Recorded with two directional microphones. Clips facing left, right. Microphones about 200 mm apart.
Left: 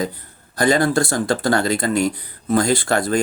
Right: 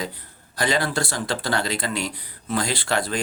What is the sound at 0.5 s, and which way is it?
Speech, 45° left (ahead or behind).